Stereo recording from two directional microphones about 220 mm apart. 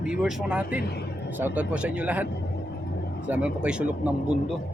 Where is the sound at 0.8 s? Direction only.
45° left (ahead or behind).